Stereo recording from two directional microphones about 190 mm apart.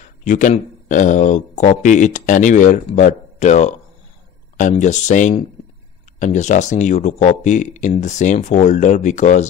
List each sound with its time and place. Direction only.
0.2 s speech: 40° left (ahead or behind)